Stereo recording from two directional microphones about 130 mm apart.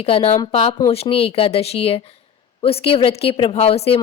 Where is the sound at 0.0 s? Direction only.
45° left (ahead or behind).